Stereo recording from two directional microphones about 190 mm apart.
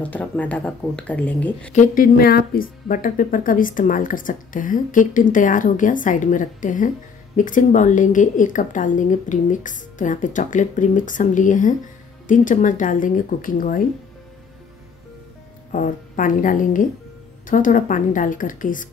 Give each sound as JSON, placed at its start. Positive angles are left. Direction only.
{"t": 0.0, "sound": "speech", "side_deg": 10}
{"t": 1.7, "sound": "speech", "side_deg": 45}
{"t": 15.7, "sound": "speech", "side_deg": 45}